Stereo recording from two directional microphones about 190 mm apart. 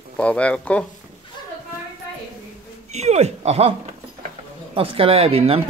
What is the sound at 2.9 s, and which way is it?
Speech, 35° right (ahead or behind).